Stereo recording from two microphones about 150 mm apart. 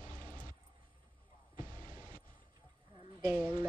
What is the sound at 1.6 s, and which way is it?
Music, 30° right (ahead or behind).